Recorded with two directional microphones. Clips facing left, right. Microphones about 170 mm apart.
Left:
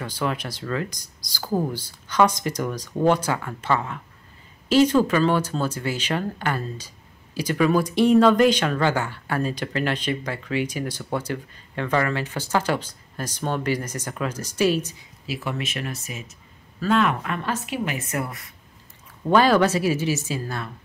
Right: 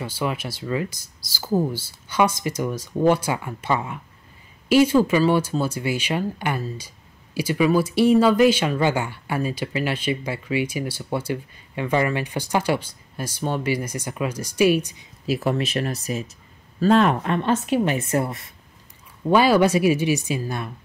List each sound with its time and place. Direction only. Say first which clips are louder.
0.0 s speech: right 1 dB; 5° right (ahead or behind)
15.2 s a woman's voice: right 7 dB; 40° right (ahead or behind)
19.2 s speech: right 1 dB; 10° right (ahead or behind)